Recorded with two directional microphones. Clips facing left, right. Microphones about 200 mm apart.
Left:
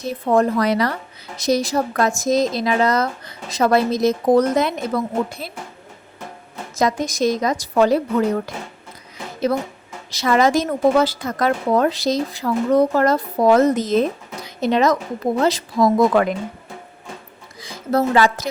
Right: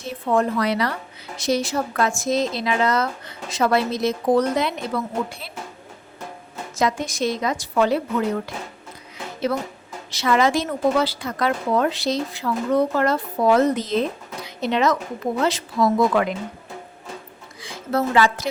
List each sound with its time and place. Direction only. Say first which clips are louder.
0.0 s a woman's voice: left 4 dB; 40° left (ahead or behind)
6.7 s a woman's voice: left 3 dB; 40° left (ahead or behind)
10.1 s a woman's voice: left 3 dB; 40° left (ahead or behind)
14.4 s a sound: left 3 dB; 40° left (ahead or behind)
15.4 s a woman's voice: left 3 dB; 40° left (ahead or behind)
17.6 s a woman's voice: left 4 dB; 40° left (ahead or behind)